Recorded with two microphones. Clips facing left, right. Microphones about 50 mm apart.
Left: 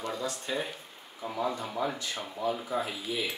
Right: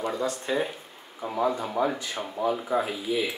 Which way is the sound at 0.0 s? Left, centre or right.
Centre.